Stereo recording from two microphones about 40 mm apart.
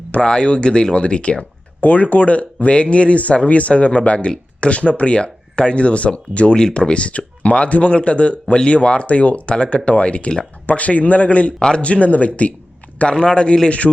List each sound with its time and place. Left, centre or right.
0.1 s speech: left
1.8 s speech: left
13.1 s speech: left